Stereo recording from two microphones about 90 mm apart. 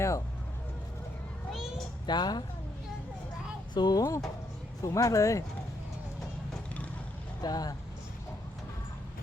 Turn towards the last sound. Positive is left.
turn(degrees=45)  # may be behind; listen again after turning